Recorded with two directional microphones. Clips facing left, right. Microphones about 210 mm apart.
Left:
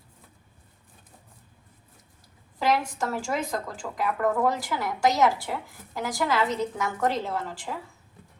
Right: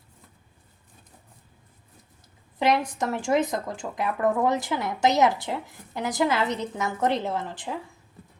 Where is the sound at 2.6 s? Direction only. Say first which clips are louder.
Right 2 dB; 20° right (ahead or behind).